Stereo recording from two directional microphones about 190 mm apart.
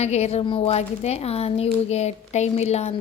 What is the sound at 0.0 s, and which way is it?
A woman's voice, 35° left (ahead or behind).